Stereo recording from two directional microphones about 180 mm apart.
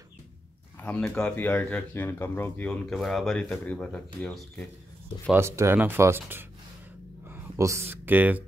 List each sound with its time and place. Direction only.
0.7 s speech: 10° left (ahead or behind)
5.3 s speech: 15° right (ahead or behind)